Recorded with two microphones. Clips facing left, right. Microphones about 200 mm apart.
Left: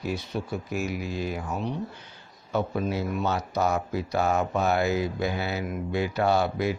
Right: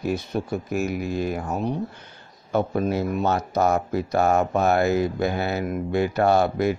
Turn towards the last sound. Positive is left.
turn(degrees=-50)  # may be behind; listen again after turning